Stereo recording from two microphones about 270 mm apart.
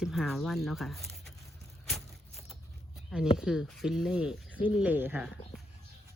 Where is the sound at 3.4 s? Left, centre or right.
Centre.